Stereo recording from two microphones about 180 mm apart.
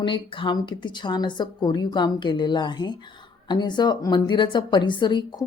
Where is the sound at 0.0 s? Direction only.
25° left (ahead or behind).